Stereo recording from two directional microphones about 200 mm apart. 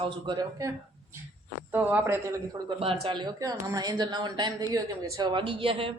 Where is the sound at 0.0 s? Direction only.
25° right (ahead or behind).